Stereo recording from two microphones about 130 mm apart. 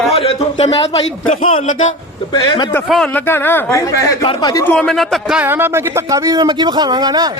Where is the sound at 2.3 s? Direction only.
35° left (ahead or behind).